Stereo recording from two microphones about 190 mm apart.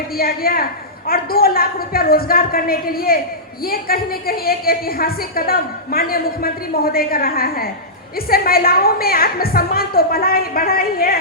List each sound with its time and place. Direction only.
0.2 s a woman's voice: 50° left (ahead or behind)